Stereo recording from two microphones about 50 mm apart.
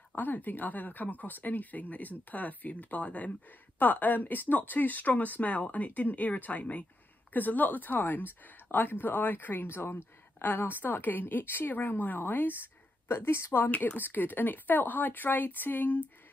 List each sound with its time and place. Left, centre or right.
0.1 s a woman's voice: left
13.1 s speech: left